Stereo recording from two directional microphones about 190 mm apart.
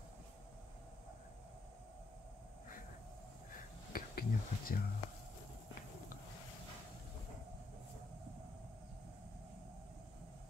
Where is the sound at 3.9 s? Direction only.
50° left (ahead or behind).